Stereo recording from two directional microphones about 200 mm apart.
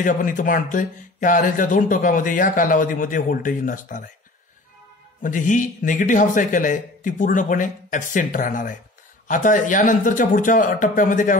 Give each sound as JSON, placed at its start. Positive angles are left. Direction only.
{"t": 0.0, "sound": "speech", "side_deg": 40}
{"t": 5.2, "sound": "speech", "side_deg": 40}